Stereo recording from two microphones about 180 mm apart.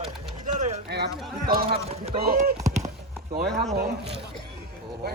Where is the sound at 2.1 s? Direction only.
55° right (ahead or behind).